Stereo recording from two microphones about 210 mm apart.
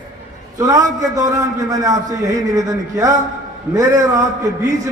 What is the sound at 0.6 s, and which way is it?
A man's voice, 15° right (ahead or behind).